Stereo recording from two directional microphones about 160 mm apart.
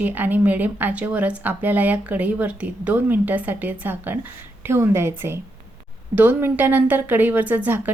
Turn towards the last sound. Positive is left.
turn(degrees=-10)  # may be behind; listen again after turning